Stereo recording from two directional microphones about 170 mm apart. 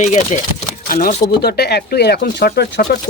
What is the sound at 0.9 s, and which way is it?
Speech, 55° left (ahead or behind).